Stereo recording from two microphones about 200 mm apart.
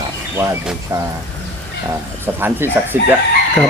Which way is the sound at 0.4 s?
15° right (ahead or behind).